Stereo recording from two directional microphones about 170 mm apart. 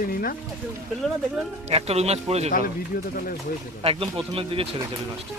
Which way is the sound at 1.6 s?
40° right (ahead or behind).